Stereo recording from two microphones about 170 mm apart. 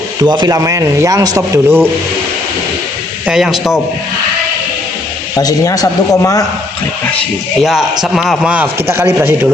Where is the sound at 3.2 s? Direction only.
5° right (ahead or behind).